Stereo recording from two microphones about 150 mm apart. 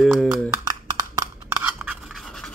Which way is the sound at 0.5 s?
25° right (ahead or behind).